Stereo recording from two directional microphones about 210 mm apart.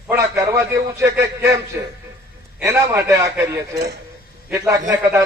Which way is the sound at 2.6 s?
15° right (ahead or behind).